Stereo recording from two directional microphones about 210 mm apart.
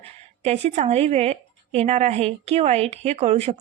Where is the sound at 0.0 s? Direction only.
30° right (ahead or behind).